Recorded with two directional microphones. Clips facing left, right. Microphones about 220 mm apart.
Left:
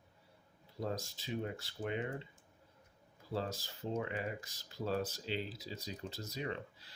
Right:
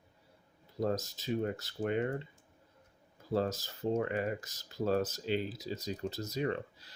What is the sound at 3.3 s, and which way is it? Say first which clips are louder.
Speech: right 7 dB; 45° right (ahead or behind).